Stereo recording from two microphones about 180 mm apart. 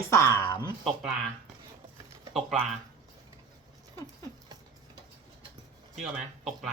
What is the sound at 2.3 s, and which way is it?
Speech, centre (ahead or behind).